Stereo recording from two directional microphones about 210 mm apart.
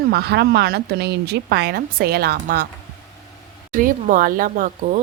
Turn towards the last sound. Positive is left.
turn(degrees=-40)  # may be behind; listen again after turning